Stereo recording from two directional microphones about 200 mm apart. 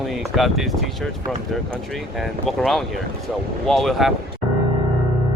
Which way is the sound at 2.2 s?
Centre (ahead or behind).